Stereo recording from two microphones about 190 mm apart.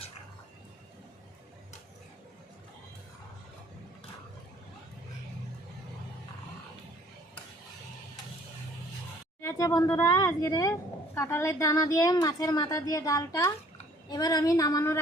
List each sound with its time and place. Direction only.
9.4 s a woman's voice: 15° left (ahead or behind)